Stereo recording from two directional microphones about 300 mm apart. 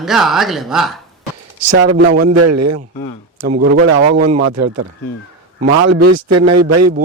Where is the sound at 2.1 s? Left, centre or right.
Right.